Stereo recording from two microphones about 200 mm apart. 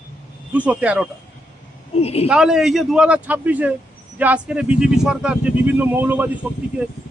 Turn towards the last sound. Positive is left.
turn(degrees=-5)  # may be behind; listen again after turning